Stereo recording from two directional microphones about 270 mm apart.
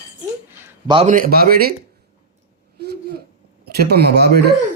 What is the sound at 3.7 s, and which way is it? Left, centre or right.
Speech, right.